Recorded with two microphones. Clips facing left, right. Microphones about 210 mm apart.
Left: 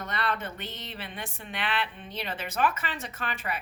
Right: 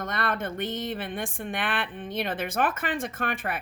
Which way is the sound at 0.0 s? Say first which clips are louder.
Right 2 dB; 50° right (ahead or behind).